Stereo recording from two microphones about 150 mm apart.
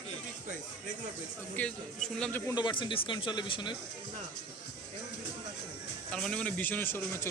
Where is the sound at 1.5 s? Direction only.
5° left (ahead or behind).